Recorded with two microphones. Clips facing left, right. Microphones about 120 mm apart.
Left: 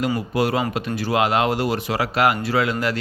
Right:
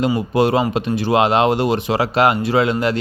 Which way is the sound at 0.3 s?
25° right (ahead or behind).